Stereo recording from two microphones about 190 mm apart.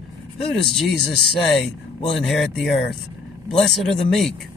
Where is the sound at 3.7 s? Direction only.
Centre (ahead or behind).